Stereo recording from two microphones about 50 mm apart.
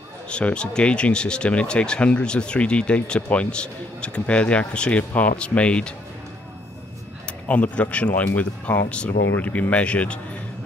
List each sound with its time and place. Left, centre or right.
0.3 s speech: left
7.4 s speech: left